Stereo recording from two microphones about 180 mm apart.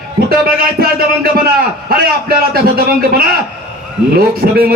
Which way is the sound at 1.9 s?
55° right (ahead or behind).